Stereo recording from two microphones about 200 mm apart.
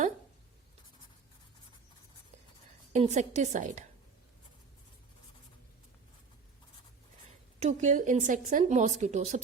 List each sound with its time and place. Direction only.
2.9 s a woman's voice: 35° right (ahead or behind)
7.6 s a woman's voice: 35° right (ahead or behind)